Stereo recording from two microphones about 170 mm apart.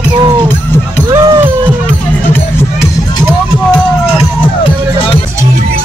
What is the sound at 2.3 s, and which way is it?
Music, 15° left (ahead or behind).